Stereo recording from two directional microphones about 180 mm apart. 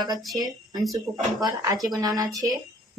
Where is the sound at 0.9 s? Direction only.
20° right (ahead or behind).